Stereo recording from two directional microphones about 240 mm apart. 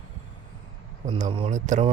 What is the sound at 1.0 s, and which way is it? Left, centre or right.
Speech, right.